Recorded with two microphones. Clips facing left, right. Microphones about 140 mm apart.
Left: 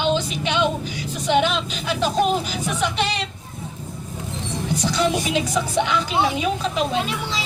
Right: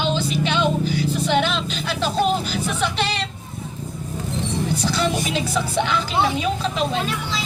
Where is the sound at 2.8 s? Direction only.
10° left (ahead or behind).